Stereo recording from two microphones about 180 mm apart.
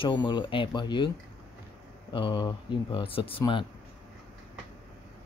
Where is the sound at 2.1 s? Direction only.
25° left (ahead or behind).